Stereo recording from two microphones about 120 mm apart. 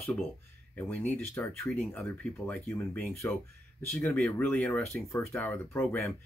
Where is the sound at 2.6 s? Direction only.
20° left (ahead or behind).